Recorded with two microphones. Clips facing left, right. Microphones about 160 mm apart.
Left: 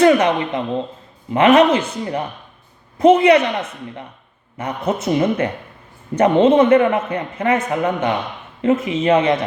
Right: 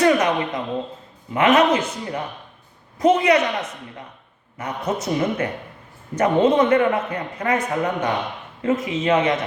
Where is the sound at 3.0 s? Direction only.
30° left (ahead or behind).